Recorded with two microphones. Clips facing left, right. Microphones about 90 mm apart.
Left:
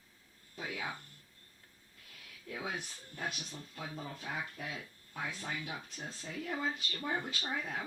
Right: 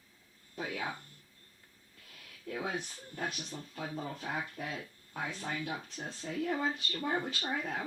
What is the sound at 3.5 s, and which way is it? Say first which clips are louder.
Speech: right 4 dB; 35° right (ahead or behind).